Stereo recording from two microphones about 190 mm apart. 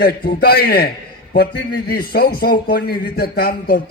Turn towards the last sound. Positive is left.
turn(degrees=50)  # may be behind; listen again after turning